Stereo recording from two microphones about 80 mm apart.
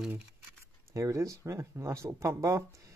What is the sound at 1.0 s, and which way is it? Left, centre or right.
Speech, right.